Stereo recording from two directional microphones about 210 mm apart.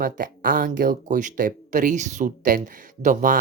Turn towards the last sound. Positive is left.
turn(degrees=-40)  # may be behind; listen again after turning